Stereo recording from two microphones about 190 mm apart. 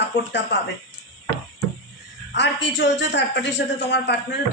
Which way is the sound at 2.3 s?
65° left (ahead or behind).